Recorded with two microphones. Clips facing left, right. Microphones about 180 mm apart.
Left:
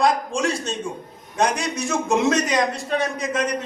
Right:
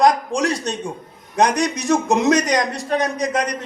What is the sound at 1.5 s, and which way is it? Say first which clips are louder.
A man's voice: right 6 dB; 40° right (ahead or behind).